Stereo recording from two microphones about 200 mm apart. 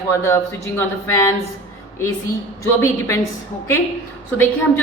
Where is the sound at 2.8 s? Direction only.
15° left (ahead or behind).